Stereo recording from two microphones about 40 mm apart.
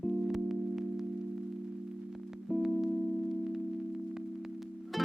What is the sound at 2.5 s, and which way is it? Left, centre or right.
Music, centre.